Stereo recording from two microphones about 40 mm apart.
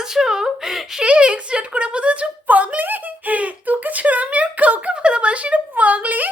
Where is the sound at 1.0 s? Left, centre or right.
Right.